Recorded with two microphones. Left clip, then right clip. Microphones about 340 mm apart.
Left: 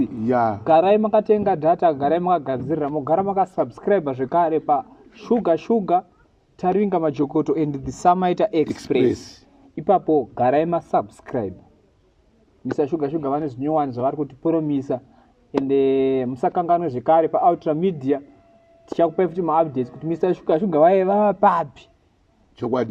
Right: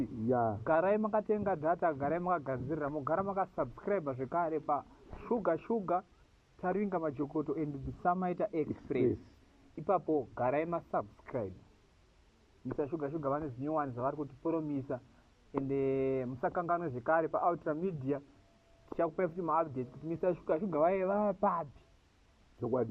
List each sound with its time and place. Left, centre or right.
0.3 s speech: left
0.6 s a man's voice: centre
12.6 s a man's voice: centre
22.6 s speech: left